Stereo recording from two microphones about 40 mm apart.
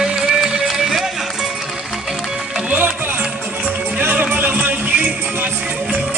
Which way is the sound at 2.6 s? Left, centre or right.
Right.